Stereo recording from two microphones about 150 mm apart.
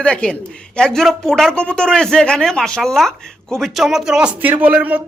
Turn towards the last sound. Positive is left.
turn(degrees=-10)  # may be behind; listen again after turning